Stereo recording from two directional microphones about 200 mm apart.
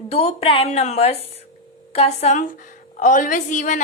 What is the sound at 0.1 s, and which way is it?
A woman's voice, 30° left (ahead or behind).